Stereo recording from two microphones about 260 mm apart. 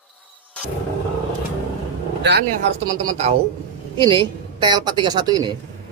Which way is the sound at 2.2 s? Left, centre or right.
Right.